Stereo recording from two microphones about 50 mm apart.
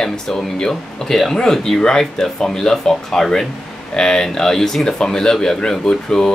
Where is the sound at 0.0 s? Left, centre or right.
Centre.